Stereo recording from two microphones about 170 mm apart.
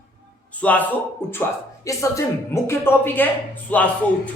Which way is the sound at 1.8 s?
15° left (ahead or behind).